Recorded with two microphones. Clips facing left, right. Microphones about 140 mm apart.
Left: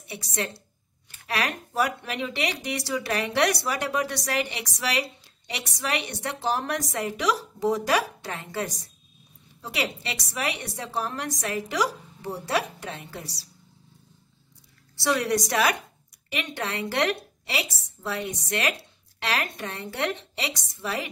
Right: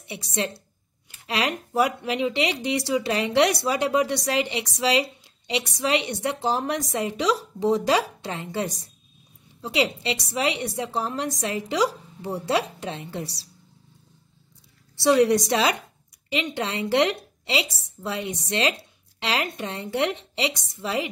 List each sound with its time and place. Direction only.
0.0 s speech: 20° right (ahead or behind)
15.0 s speech: 20° right (ahead or behind)